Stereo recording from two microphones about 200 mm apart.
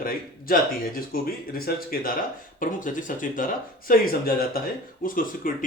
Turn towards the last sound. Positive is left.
turn(degrees=45)  # may be behind; listen again after turning